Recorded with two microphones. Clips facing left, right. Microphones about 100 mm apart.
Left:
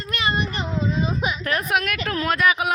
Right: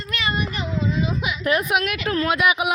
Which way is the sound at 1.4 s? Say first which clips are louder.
Right 4 dB; 10° right (ahead or behind).